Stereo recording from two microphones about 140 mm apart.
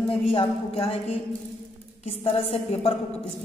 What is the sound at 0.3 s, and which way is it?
Speech, 40° left (ahead or behind).